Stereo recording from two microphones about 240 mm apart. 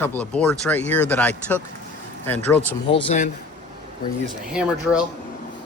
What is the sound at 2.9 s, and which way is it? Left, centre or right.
Speech, left.